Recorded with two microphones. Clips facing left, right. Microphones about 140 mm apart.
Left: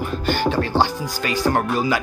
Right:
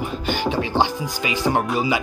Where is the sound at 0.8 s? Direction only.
15° right (ahead or behind).